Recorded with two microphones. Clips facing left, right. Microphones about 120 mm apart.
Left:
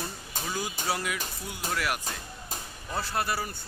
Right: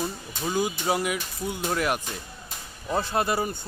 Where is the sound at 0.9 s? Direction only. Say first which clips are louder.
Right 5 dB; 20° right (ahead or behind).